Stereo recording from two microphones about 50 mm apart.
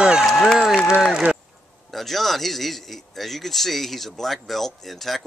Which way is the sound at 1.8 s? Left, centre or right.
Centre.